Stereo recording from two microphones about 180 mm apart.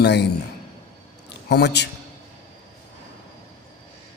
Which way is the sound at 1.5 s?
70° left (ahead or behind).